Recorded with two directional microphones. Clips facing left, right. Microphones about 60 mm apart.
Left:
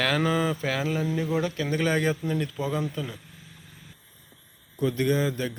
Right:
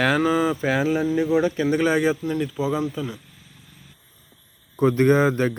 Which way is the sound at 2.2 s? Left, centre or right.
Centre.